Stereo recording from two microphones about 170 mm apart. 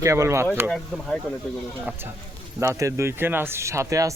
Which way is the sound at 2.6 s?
20° right (ahead or behind).